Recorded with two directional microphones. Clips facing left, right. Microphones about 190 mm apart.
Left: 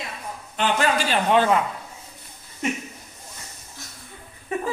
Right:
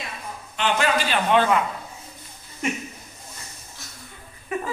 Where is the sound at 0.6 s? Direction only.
40° left (ahead or behind).